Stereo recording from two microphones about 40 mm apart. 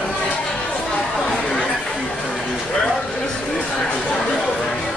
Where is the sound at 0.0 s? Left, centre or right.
Left.